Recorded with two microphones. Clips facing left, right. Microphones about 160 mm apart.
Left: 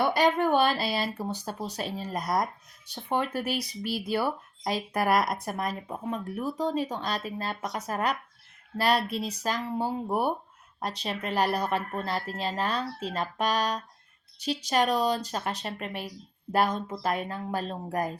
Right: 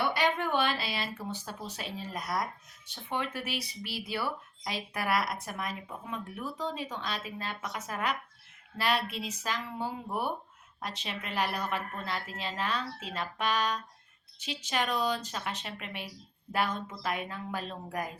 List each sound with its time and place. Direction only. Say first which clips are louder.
0.0 s speech: left 6 dB; 40° left (ahead or behind)